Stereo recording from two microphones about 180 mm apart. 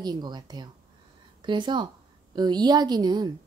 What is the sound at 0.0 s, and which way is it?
Speech, 25° right (ahead or behind).